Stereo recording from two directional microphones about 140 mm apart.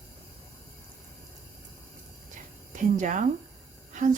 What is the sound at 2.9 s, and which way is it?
Speech, 60° right (ahead or behind).